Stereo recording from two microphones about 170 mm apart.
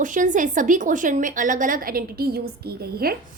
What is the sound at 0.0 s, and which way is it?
A woman's voice, 50° right (ahead or behind).